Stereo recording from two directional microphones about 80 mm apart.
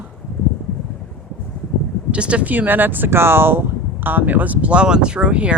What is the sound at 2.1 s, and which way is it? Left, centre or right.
Speech, centre.